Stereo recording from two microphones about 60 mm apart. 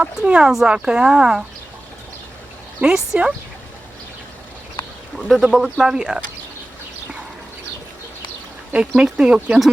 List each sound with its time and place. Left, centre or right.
0.0 s speech: centre
2.8 s speech: centre
4.8 s a sound: left
5.4 s speech: centre
8.7 s speech: centre